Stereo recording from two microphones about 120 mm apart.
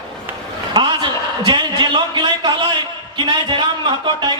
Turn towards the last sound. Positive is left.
turn(degrees=-40)  # may be behind; listen again after turning